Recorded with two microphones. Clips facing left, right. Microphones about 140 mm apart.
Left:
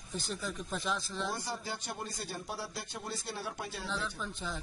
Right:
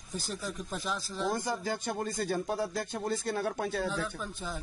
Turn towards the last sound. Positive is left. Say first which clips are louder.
# right 3 dB
turn(degrees=-5)  # may be behind; listen again after turning